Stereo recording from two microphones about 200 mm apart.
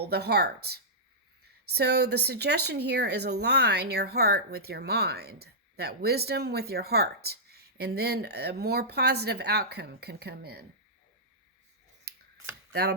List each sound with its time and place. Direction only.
0.0 s a woman's voice: 55° right (ahead or behind)
12.1 s scissors: 55° right (ahead or behind)